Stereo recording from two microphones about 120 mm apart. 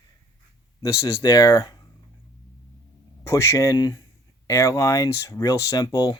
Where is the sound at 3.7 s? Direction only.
40° left (ahead or behind).